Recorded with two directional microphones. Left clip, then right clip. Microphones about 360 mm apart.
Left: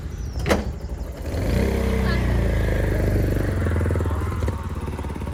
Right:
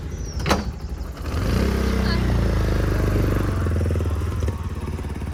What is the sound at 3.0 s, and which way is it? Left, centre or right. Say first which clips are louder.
Vehicle: right 1 dB; centre.